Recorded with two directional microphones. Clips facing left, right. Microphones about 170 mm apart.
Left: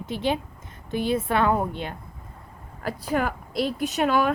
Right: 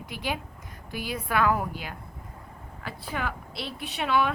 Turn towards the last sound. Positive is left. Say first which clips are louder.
# left 4 dB
turn(degrees=45)  # may be behind; listen again after turning